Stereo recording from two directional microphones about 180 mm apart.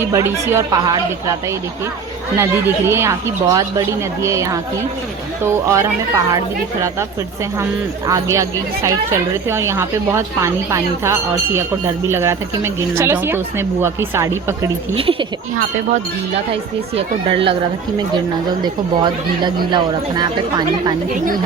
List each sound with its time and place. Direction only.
0.0 s speech: 15° right (ahead or behind)
2.4 s speech: 15° right (ahead or behind)
8.0 s speech: 15° right (ahead or behind)
14.9 s speech: 30° right (ahead or behind)
16.9 s speech: 30° right (ahead or behind)
18.6 s speech: 25° right (ahead or behind)